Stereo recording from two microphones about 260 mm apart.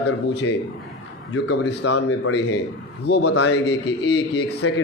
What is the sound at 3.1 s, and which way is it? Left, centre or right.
A man's voice, left.